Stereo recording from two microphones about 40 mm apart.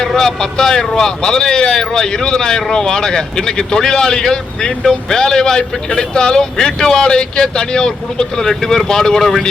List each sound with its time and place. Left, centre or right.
0.2 s speech: centre